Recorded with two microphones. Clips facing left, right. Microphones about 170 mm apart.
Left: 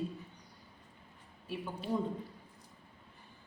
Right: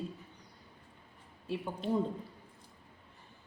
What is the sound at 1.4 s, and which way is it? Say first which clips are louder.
Speech: right 3 dB; 25° right (ahead or behind).